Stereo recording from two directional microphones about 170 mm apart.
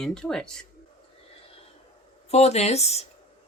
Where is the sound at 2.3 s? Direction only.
40° left (ahead or behind).